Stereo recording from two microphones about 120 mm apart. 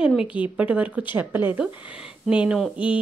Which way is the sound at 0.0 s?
5° right (ahead or behind).